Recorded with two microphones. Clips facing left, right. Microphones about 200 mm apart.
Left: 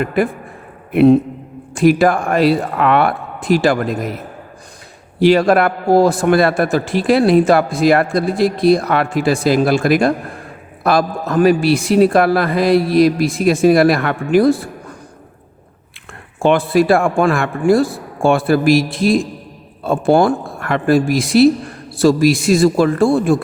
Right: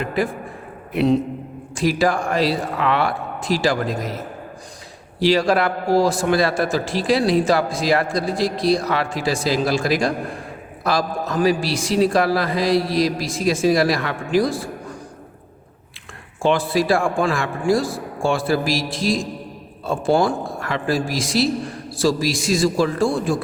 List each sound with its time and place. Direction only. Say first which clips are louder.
0.9 s a man's voice: left 8 dB; 55° left (ahead or behind)
5.2 s a man's voice: left 6 dB; 55° left (ahead or behind)
16.4 s a man's voice: left 6 dB; 60° left (ahead or behind)